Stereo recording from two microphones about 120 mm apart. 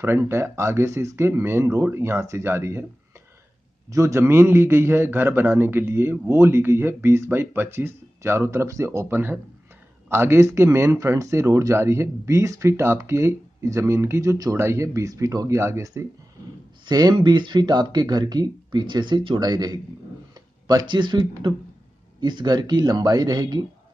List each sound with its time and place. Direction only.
0.0 s speech: 20° right (ahead or behind)
3.9 s speech: 25° right (ahead or behind)
16.8 s speech: 35° right (ahead or behind)